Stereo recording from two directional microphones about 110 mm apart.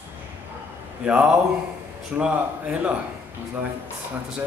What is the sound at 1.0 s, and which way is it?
Speech, 10° right (ahead or behind).